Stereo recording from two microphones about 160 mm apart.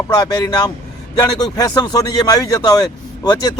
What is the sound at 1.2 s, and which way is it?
A man's voice, 25° left (ahead or behind).